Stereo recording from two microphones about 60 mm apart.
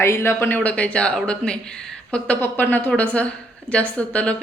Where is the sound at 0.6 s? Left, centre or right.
Left.